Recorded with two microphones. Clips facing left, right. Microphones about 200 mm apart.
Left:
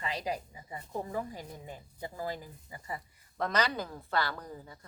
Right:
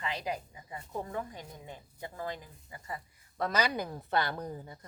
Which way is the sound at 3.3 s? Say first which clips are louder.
Even; 5° right (ahead or behind).